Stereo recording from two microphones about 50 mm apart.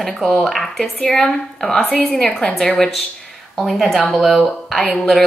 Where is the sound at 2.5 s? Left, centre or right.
Centre.